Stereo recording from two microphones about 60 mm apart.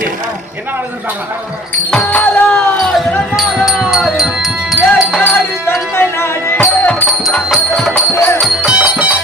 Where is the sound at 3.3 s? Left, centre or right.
Centre.